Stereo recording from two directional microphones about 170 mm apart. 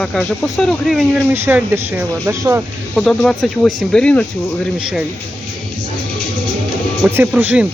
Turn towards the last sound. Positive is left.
turn(degrees=-10)  # may be behind; listen again after turning